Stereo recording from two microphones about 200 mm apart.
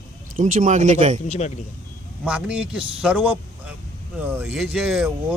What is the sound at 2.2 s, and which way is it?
Speech, 5° right (ahead or behind).